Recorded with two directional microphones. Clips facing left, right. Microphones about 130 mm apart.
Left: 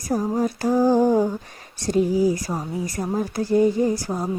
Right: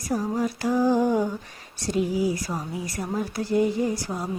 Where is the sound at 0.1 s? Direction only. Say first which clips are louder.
Left 3 dB; 40° left (ahead or behind).